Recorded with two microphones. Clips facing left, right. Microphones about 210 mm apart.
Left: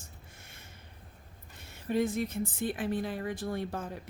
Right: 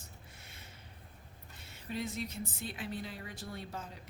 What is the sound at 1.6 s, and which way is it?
A woman's voice, 50° left (ahead or behind).